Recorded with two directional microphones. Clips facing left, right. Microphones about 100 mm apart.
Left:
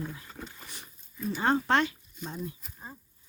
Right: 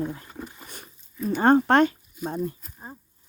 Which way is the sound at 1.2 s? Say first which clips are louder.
Right 8 dB; 50° right (ahead or behind).